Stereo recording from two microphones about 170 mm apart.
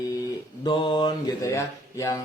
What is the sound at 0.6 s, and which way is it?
Speech, 25° left (ahead or behind).